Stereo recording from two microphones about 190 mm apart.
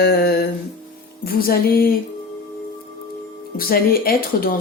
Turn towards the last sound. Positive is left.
turn(degrees=50)  # may be behind; listen again after turning